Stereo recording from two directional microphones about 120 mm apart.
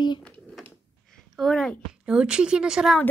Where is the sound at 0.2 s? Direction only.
5° left (ahead or behind).